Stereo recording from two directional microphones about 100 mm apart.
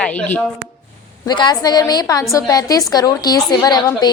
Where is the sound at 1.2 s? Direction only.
45° left (ahead or behind).